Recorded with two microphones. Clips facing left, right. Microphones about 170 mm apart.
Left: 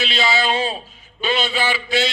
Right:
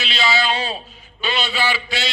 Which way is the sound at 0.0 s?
50° left (ahead or behind).